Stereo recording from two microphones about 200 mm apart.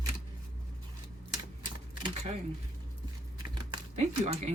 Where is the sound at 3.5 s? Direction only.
30° right (ahead or behind).